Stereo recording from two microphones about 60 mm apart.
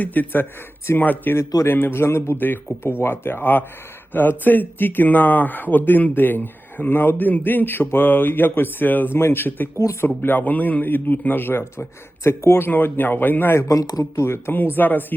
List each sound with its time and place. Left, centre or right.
0.0 s a man's voice: left
13.7 s speech: left
14.2 s a man's voice: left